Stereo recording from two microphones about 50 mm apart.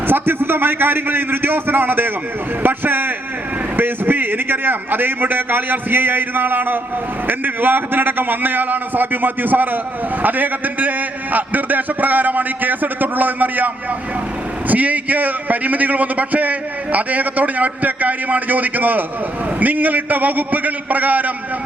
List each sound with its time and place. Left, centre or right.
0.1 s a man's voice: right
14.7 s a man's voice: right